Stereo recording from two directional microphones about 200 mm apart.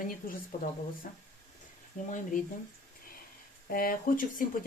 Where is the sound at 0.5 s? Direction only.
40° left (ahead or behind).